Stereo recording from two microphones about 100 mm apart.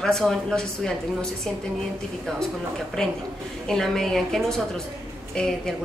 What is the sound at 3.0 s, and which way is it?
Speech, 5° left (ahead or behind).